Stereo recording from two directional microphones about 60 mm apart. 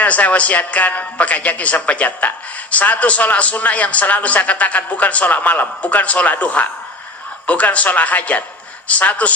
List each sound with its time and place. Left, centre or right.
0.0 s a man's voice: left